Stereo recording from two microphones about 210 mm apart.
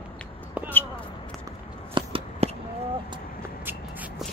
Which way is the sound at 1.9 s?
25° right (ahead or behind).